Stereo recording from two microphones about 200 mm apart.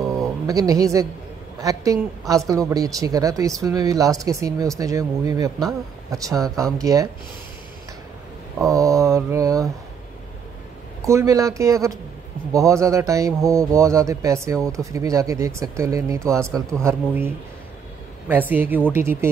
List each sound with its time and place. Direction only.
0.5 s speech: 15° right (ahead or behind)
8.5 s speech: 15° right (ahead or behind)
11.1 s speech: 15° right (ahead or behind)
18.3 s speech: 10° right (ahead or behind)